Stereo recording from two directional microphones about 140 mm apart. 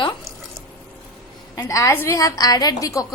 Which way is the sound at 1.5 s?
25° left (ahead or behind).